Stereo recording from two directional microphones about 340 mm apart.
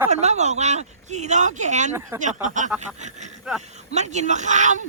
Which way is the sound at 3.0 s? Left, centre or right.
Right.